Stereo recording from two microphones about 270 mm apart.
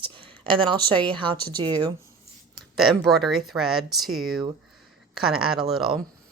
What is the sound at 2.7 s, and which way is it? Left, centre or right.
Speech, centre.